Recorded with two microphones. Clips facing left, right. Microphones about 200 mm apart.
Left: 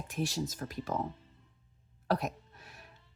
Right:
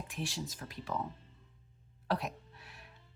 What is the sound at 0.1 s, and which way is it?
Speech, 40° left (ahead or behind).